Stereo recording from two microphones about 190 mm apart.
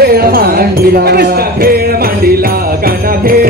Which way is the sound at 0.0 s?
55° right (ahead or behind).